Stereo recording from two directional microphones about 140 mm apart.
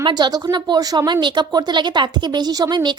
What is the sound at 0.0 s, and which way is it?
A woman's voice, 30° right (ahead or behind).